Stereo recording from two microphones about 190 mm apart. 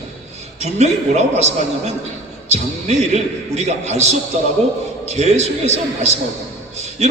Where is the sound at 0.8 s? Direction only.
35° right (ahead or behind).